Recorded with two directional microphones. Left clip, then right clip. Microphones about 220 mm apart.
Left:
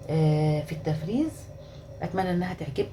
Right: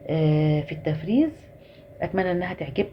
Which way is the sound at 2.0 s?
30° right (ahead or behind).